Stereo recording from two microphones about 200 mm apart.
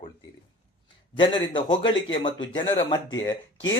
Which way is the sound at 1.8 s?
70° left (ahead or behind).